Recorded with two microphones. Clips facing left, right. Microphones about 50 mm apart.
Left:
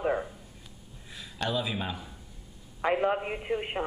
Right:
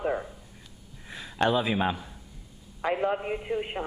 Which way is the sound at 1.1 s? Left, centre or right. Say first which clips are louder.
Right 6 dB; right.